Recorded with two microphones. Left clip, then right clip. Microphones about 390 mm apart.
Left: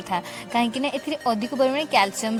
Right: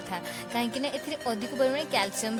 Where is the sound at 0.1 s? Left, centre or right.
Right.